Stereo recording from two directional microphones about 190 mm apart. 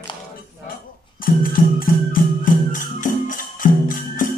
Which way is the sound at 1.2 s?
50° left (ahead or behind).